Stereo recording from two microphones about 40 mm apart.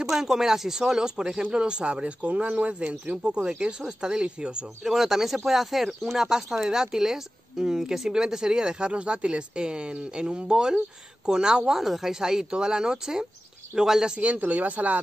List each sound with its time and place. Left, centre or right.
0.1 s speech: centre
4.8 s speech: centre
14.1 s speech: right